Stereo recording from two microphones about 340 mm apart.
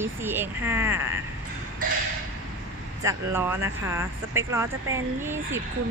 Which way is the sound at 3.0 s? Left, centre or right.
Centre.